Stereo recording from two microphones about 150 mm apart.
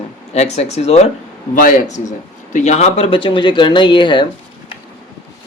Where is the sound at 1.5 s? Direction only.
60° left (ahead or behind); by 4.2 s 30° left (ahead or behind).